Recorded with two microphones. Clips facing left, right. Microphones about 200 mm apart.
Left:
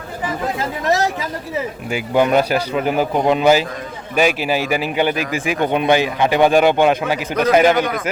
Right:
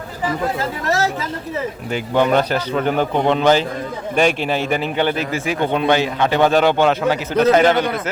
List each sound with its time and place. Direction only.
0.9 s a man's voice: 15° left (ahead or behind)